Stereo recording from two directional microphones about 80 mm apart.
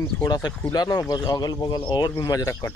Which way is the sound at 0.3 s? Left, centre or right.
Left.